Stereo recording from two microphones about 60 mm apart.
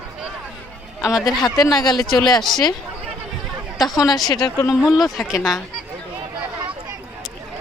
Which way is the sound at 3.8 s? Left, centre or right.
Centre.